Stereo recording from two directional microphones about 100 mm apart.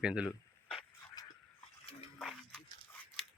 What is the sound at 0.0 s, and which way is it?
Speech, 10° right (ahead or behind).